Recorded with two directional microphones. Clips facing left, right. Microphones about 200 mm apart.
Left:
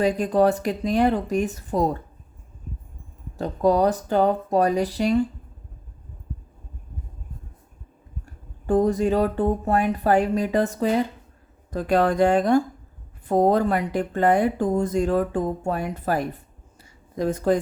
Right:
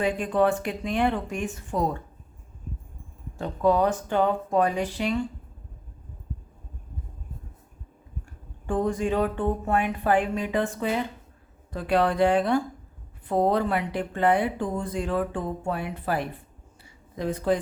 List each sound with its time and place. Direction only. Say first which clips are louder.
0.0 s speech: left 4 dB; 40° left (ahead or behind)
3.3 s speech: left 2 dB; 40° left (ahead or behind)
8.6 s speech: left 6 dB; 40° left (ahead or behind)